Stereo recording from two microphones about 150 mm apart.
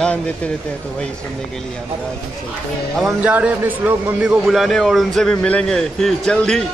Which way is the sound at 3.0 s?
10° right (ahead or behind).